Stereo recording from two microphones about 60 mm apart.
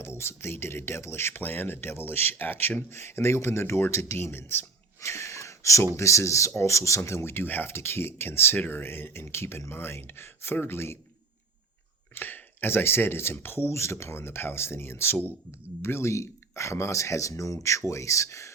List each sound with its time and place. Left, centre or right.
0.0 s speech: left
4.9 s a sound: left
6.0 s speech: left
12.1 s speech: left